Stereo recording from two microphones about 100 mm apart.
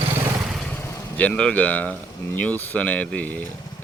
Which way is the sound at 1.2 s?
10° left (ahead or behind).